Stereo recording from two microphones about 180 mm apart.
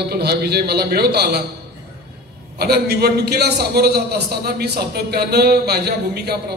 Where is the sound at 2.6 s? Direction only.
60° right (ahead or behind).